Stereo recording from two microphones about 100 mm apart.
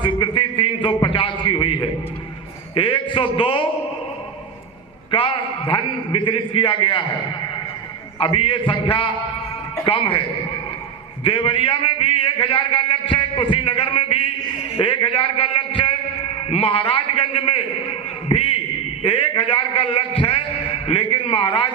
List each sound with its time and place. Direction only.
0.0 s a sound: 55° left (ahead or behind)
1.0 s a man's voice: 60° left (ahead or behind)
5.1 s a man's voice: 60° left (ahead or behind)
8.2 s a man's voice: 60° left (ahead or behind)
18.3 s a sound: 65° left (ahead or behind)
19.0 s a man's voice: 60° left (ahead or behind)